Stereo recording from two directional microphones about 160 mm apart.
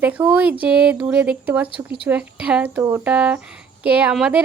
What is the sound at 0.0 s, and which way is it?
Speech, 10° right (ahead or behind).